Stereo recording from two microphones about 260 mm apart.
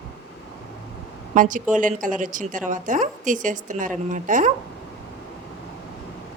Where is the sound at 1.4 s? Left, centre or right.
Right.